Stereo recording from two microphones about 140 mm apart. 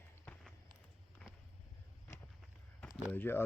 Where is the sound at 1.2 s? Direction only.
10° left (ahead or behind).